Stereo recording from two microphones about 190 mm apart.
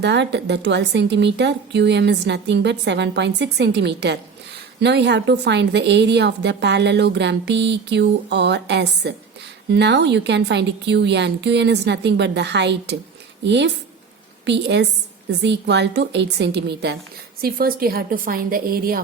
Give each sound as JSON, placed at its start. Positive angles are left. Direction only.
{"t": 0.0, "sound": "a woman's voice", "side_deg": -65}